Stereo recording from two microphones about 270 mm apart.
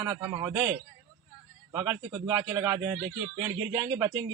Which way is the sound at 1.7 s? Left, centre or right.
Centre.